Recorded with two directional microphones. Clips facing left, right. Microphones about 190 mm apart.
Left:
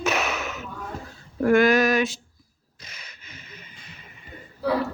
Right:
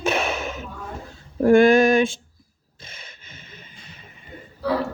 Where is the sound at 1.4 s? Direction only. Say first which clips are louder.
Right 4 dB; 30° right (ahead or behind).